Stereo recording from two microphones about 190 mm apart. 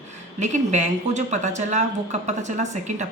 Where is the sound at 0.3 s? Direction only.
40° right (ahead or behind).